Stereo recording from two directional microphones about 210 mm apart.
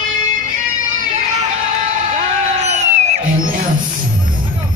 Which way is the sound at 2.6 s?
35° right (ahead or behind).